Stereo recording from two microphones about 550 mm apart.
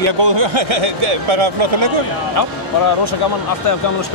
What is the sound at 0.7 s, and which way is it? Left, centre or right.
Speech, right.